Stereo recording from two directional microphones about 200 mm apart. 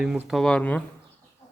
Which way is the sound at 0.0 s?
5° right (ahead or behind).